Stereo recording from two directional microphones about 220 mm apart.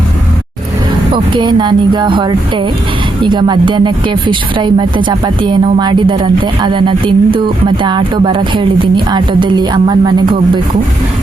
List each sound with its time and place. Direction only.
1.1 s speech: 20° right (ahead or behind)